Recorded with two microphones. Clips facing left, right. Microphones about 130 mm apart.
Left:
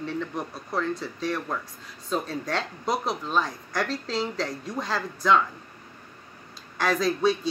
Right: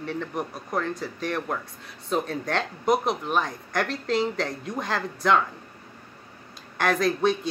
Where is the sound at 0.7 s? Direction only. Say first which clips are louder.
Even; 50° right (ahead or behind).